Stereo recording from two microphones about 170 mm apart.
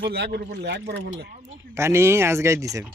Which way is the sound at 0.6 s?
85° right.